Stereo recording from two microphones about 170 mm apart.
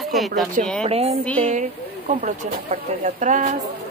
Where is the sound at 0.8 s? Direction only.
35° right (ahead or behind).